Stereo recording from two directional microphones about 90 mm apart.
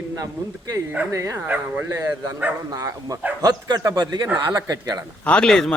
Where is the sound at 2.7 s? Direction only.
40° right (ahead or behind).